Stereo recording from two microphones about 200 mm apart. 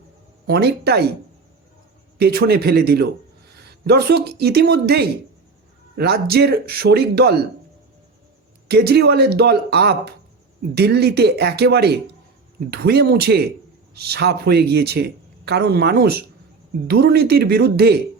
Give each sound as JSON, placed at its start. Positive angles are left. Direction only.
{"t": 0.4, "sound": "speech", "side_deg": -55}
{"t": 2.1, "sound": "speech", "side_deg": -55}
{"t": 8.6, "sound": "speech", "side_deg": -55}